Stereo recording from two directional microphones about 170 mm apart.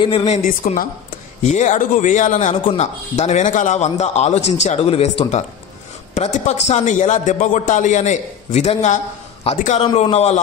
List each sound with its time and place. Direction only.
0.0 s a man's voice: 30° left (ahead or behind)
0.4 s a man's voice: 50° left (ahead or behind)